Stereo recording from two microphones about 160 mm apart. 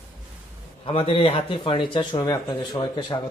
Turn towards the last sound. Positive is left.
turn(degrees=25)  # may be behind; listen again after turning